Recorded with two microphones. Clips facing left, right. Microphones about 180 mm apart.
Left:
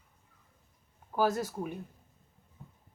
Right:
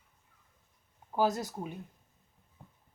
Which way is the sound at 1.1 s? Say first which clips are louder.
Left 1 dB; 20° right (ahead or behind).